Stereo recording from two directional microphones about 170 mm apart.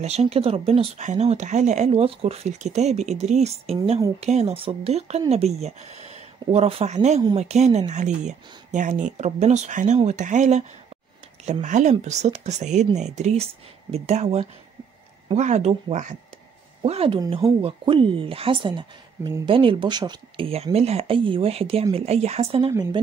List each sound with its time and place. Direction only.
0.0 s speech: 40° right (ahead or behind)
11.6 s speech: 45° right (ahead or behind); by 23.0 s 25° right (ahead or behind)